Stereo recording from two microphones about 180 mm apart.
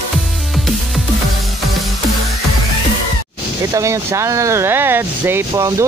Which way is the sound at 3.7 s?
15° right (ahead or behind).